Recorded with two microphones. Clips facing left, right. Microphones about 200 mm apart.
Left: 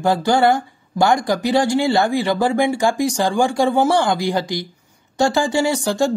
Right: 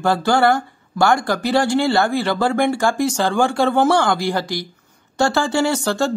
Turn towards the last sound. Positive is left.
turn(degrees=15)  # may be behind; listen again after turning